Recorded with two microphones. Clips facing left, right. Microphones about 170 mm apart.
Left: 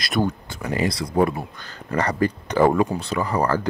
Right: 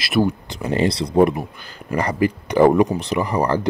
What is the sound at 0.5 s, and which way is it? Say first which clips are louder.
Speech: right 4 dB; 25° right (ahead or behind).